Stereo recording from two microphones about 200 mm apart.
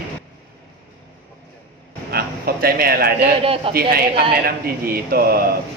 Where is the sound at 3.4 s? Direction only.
30° right (ahead or behind).